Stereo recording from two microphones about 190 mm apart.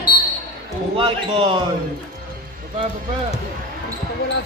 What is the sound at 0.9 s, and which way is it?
Speech, 30° right (ahead or behind).